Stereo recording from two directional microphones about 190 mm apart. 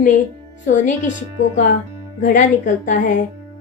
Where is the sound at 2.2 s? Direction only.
40° left (ahead or behind).